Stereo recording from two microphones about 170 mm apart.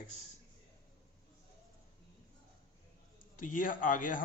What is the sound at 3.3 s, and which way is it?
Speech, 50° left (ahead or behind).